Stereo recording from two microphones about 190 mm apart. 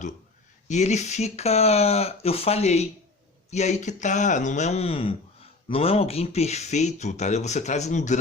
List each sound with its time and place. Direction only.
0.7 s speech: 40° left (ahead or behind)